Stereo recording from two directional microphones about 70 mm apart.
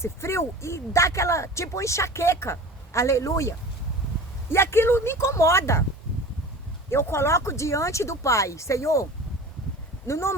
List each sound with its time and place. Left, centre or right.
0.0 s speech: left
4.5 s speech: left
6.9 s speech: left
10.1 s speech: left